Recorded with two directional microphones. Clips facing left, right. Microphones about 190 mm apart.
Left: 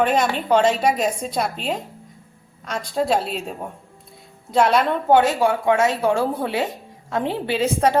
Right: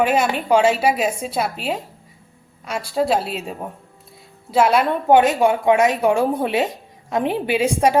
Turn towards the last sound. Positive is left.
turn(degrees=-10)  # may be behind; listen again after turning